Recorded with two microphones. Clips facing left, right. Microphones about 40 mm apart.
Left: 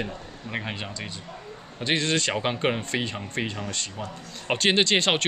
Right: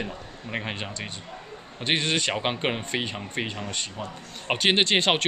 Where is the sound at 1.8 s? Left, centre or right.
Right.